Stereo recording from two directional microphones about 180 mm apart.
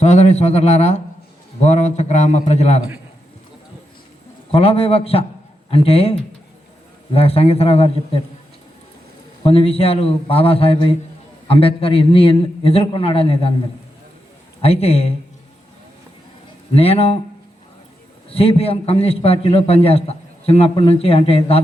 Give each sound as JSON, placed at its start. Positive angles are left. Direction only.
{"t": 0.0, "sound": "a man's voice", "side_deg": 40}
{"t": 4.5, "sound": "a man's voice", "side_deg": 30}
{"t": 9.4, "sound": "a man's voice", "side_deg": 30}
{"t": 14.6, "sound": "a man's voice", "side_deg": 35}
{"t": 16.7, "sound": "a man's voice", "side_deg": 35}
{"t": 18.3, "sound": "a man's voice", "side_deg": 30}